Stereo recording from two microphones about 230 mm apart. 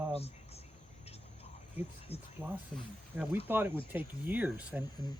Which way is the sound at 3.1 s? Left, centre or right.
Centre.